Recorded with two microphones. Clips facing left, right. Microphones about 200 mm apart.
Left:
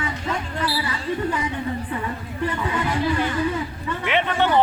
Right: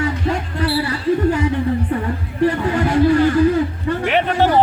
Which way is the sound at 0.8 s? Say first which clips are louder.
Right 8 dB; 40° right (ahead or behind).